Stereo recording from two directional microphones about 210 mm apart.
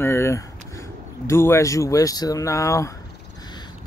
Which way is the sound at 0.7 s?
15° left (ahead or behind).